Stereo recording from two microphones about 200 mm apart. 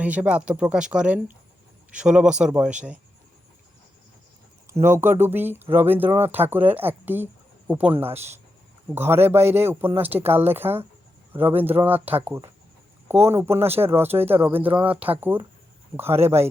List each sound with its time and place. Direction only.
0.0 s speech: 5° right (ahead or behind)
4.7 s speech: 10° right (ahead or behind)